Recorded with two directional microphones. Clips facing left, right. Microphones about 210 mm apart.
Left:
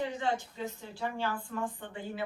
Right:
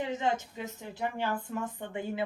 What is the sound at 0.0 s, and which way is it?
A woman's voice, 20° right (ahead or behind).